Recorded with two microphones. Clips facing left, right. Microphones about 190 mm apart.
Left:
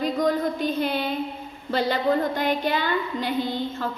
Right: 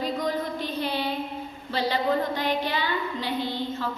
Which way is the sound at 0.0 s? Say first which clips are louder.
Left 5 dB; 45° left (ahead or behind).